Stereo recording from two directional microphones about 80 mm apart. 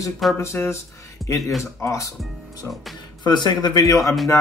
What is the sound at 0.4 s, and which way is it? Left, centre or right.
Speech, left.